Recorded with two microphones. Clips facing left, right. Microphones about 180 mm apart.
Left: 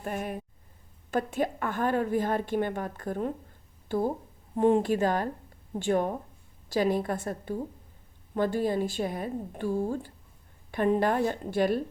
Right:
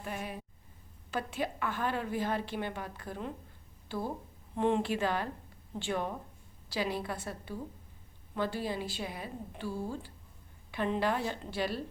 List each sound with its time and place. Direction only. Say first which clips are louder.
0.0 s a woman's voice: left 6 dB; 50° left (ahead or behind)